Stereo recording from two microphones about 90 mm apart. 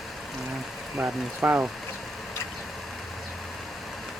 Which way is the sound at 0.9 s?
15° right (ahead or behind).